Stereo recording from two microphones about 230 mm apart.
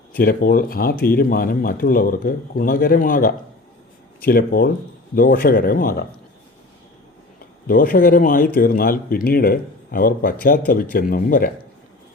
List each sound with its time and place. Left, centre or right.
0.2 s speech: left
7.7 s speech: left